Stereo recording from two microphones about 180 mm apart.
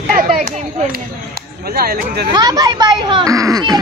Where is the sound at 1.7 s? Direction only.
55° right (ahead or behind).